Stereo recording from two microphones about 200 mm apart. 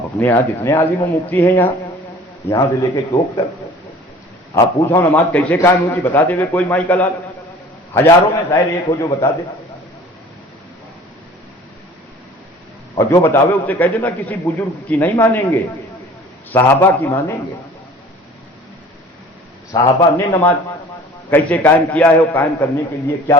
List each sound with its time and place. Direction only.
0.2 s a man's voice: 10° left (ahead or behind)
4.5 s a man's voice: 10° left (ahead or behind)
13.0 s a man's voice: 15° left (ahead or behind)
19.7 s a man's voice: 15° left (ahead or behind)